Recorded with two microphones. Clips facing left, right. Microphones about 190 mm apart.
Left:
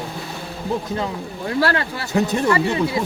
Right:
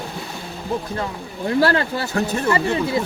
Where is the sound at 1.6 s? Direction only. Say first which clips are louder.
Right 2 dB; 25° right (ahead or behind).